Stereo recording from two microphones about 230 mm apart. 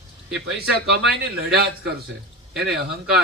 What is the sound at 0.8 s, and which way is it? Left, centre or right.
Speech, right.